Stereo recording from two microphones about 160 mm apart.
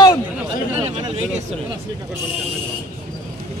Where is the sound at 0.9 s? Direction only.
35° right (ahead or behind).